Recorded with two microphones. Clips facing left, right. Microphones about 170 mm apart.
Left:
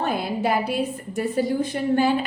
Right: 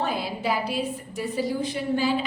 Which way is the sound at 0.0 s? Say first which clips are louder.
Left 3 dB; 55° left (ahead or behind).